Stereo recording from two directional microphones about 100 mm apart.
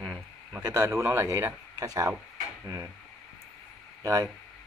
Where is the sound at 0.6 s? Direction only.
30° right (ahead or behind).